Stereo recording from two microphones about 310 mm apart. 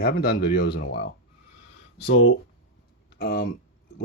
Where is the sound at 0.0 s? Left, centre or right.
Left.